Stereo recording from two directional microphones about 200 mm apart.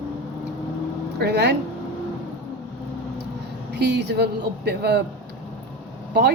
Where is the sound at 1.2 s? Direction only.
55° right (ahead or behind).